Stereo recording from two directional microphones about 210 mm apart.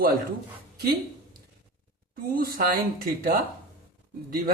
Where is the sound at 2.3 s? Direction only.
45° right (ahead or behind).